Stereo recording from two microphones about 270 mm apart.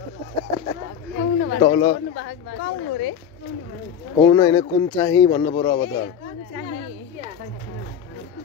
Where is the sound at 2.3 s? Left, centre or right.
Left.